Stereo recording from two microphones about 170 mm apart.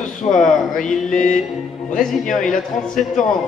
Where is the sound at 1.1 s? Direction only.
50° left (ahead or behind).